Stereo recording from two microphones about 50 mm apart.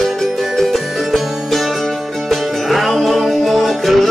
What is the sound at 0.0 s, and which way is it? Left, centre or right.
Music, centre.